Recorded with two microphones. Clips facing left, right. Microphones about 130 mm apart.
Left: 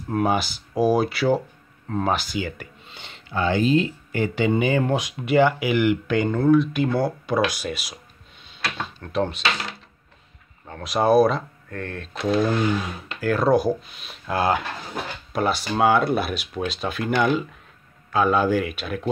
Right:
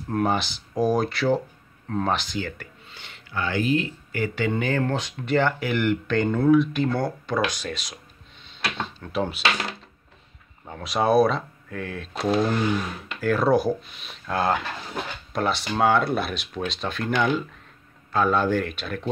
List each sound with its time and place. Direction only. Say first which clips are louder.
0.1 s speech: left 2 dB; 5° left (ahead or behind); by 4.5 s 25° left (ahead or behind)
4.5 s speech: left 4 dB; 15° left (ahead or behind)
9.0 s speech: left 3 dB; centre (ahead or behind)
10.7 s speech: left 2 dB; centre (ahead or behind)